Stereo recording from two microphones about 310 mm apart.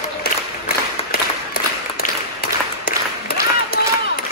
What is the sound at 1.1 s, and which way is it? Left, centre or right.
Applause, left.